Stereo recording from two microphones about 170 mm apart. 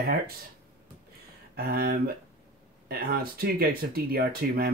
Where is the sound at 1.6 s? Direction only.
65° right (ahead or behind).